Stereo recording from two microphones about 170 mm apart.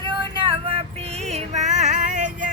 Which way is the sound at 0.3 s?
30° right (ahead or behind).